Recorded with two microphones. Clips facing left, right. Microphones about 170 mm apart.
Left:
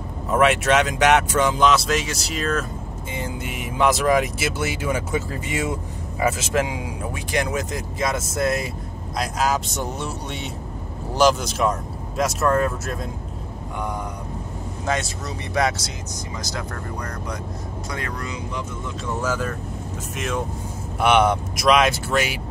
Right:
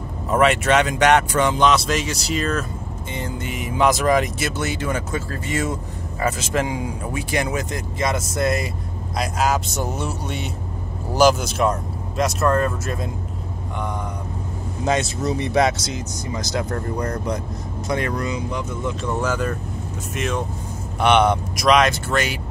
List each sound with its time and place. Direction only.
0.3 s speech: centre (ahead or behind)
14.9 s speech: 20° right (ahead or behind)
19.2 s speech: 5° left (ahead or behind)